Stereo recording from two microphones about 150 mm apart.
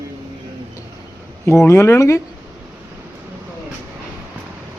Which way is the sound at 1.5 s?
15° left (ahead or behind).